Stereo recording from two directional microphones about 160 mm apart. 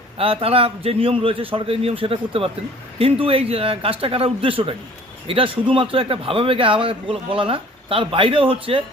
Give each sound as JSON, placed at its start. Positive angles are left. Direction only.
{"t": 0.2, "sound": "a man's voice", "side_deg": -35}